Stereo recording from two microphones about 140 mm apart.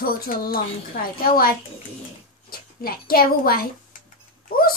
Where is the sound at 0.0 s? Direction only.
90° left.